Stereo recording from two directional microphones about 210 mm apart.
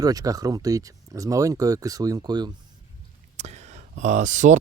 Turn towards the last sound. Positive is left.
turn(degrees=-35)  # may be behind; listen again after turning